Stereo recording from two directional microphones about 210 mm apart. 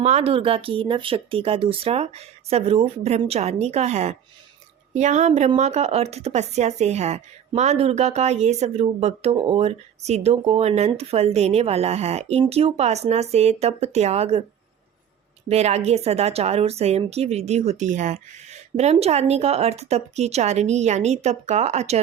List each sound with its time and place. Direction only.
0.0 s speech: 30° right (ahead or behind)
15.4 s speech: 30° right (ahead or behind)